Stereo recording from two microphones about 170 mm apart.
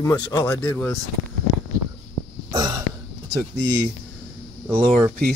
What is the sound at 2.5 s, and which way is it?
Throat clearing, 20° right (ahead or behind).